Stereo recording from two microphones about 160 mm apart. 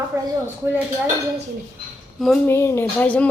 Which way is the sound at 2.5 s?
15° left (ahead or behind).